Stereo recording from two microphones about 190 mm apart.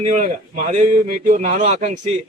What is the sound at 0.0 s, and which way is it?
Speech, 40° right (ahead or behind).